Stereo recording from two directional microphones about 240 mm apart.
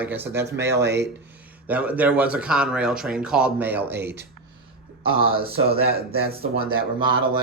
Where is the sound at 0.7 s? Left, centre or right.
Right.